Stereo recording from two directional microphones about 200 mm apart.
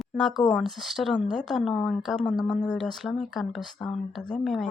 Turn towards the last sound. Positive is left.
turn(degrees=0)  # may be behind; listen again after turning